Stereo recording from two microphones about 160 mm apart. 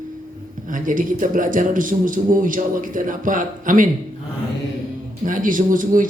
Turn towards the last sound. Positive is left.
turn(degrees=-55)  # may be behind; listen again after turning